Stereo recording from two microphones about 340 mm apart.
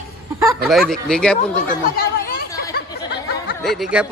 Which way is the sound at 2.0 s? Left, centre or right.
Left.